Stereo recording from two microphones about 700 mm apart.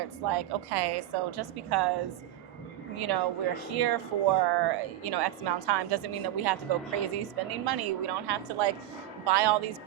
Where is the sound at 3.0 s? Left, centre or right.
Right.